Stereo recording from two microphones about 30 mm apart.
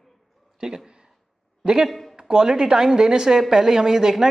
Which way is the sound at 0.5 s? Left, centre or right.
Right.